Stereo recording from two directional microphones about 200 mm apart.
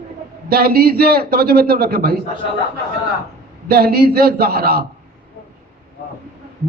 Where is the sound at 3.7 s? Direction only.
50° right (ahead or behind).